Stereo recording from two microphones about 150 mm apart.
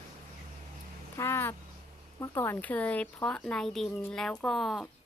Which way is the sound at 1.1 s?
15° left (ahead or behind).